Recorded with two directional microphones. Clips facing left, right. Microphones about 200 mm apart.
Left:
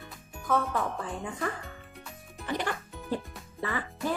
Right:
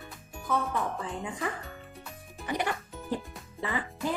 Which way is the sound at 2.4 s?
15° right (ahead or behind).